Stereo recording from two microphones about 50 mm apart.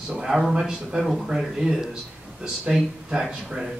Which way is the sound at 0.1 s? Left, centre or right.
Centre.